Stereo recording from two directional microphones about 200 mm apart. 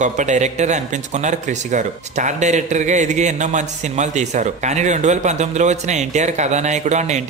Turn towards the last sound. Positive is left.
turn(degrees=-35)  # may be behind; listen again after turning